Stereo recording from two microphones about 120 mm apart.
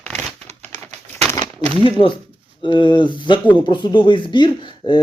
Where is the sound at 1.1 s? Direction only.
20° left (ahead or behind).